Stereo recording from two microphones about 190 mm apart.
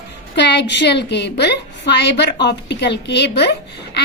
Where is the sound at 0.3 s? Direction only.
65° left (ahead or behind).